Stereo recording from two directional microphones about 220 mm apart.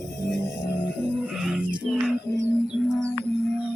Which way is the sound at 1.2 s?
5° right (ahead or behind).